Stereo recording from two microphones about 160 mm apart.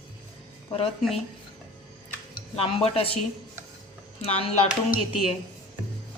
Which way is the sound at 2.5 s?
35° left (ahead or behind).